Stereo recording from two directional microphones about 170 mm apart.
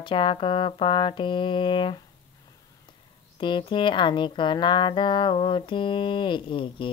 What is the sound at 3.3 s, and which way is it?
Speech, 30° left (ahead or behind).